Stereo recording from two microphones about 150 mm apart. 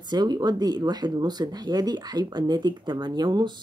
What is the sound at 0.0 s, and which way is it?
Speech, 30° right (ahead or behind).